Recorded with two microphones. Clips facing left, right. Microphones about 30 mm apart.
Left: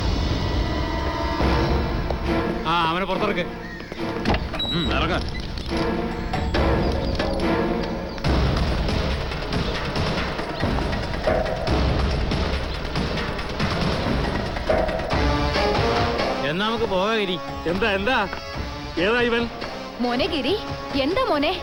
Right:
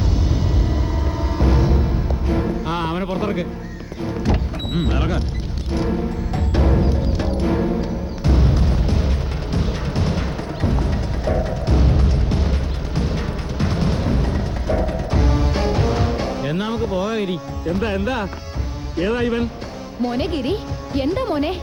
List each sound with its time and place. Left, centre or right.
1.2 s music: left
6.3 s music: left
18.9 s speech: left